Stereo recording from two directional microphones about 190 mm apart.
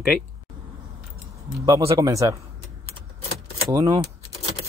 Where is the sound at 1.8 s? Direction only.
15° right (ahead or behind).